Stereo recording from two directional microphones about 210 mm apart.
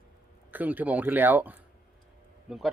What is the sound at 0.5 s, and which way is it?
A man's voice, 10° right (ahead or behind).